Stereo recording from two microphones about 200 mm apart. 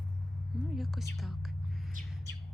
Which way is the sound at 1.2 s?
Centre (ahead or behind).